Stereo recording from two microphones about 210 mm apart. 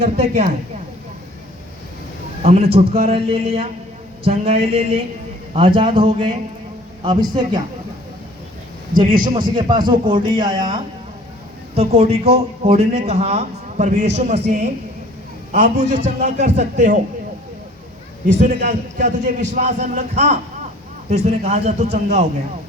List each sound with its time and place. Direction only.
0.0 s a man's voice: 30° right (ahead or behind)
2.4 s a man's voice: 30° right (ahead or behind)
9.1 s a man's voice: 20° right (ahead or behind)
11.8 s a man's voice: 30° right (ahead or behind)
18.3 s a man's voice: 35° right (ahead or behind)